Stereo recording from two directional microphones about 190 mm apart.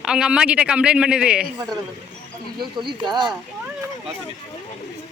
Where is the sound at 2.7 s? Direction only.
25° right (ahead or behind).